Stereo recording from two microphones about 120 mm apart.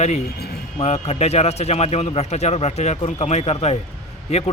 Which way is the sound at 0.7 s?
60° left (ahead or behind).